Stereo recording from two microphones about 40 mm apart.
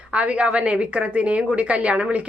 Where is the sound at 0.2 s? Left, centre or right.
Right.